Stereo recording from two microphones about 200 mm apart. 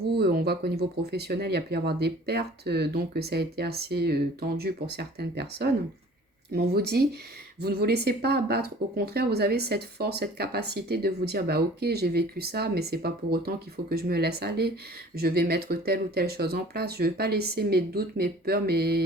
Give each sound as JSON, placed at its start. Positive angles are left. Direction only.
{"t": 0.2, "sound": "speech", "side_deg": -50}